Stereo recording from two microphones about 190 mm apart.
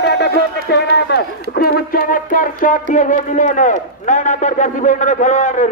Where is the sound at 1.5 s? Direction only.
55° left (ahead or behind).